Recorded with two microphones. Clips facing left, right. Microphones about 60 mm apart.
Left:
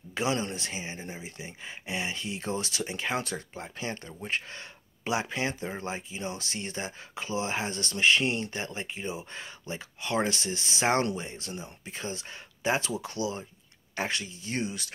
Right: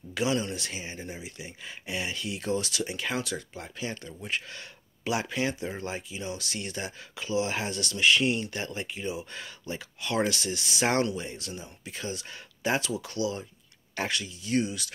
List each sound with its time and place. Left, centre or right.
0.1 s speech: left